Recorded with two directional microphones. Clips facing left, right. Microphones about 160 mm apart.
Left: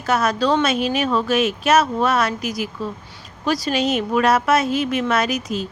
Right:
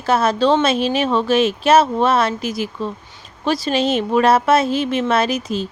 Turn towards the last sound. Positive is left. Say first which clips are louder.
# right 2 dB
turn(degrees=-30)  # may be behind; listen again after turning